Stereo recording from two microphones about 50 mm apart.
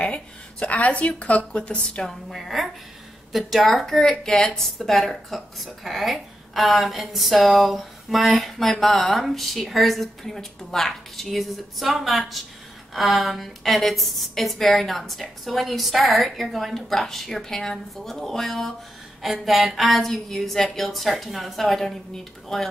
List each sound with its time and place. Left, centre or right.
0.0 s a woman's voice: left
2.0 s a woman's voice: centre